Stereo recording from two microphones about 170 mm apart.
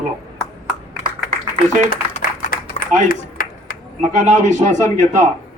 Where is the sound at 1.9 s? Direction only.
55° left (ahead or behind).